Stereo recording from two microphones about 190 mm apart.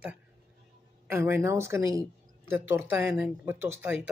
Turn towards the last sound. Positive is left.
turn(degrees=-10)  # may be behind; listen again after turning